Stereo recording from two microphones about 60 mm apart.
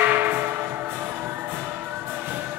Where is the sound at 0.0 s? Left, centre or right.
Right.